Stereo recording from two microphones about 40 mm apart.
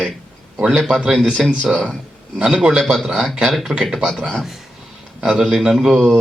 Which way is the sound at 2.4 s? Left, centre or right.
Centre.